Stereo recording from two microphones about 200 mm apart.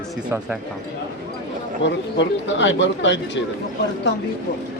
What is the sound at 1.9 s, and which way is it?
Speech, 65° left (ahead or behind).